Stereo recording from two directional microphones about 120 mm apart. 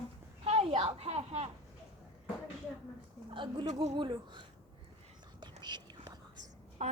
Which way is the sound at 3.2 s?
45° right (ahead or behind).